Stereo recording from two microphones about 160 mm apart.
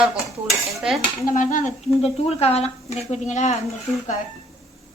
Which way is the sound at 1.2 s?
55° left (ahead or behind).